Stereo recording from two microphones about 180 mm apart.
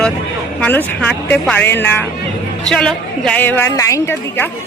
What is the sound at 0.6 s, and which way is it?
A woman's voice, 10° left (ahead or behind).